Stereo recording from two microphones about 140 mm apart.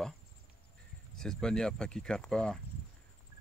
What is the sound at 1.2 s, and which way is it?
Speech, 5° left (ahead or behind).